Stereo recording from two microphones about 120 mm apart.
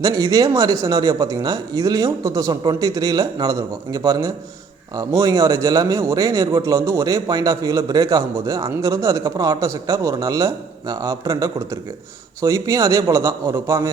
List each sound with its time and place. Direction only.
0.0 s a man's voice: 30° right (ahead or behind)